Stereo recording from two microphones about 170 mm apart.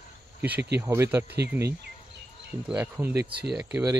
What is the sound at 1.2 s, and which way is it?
Speech, 75° right (ahead or behind).